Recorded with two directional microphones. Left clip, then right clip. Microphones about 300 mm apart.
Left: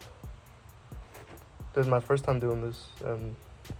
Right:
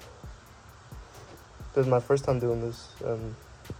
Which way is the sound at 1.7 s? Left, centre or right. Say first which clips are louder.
Right 3 dB; centre.